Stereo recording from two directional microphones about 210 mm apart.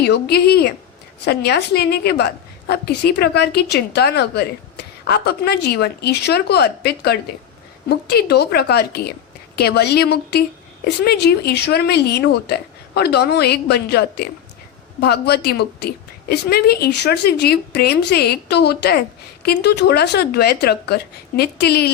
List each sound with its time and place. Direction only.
0.0 s speech: 50° left (ahead or behind)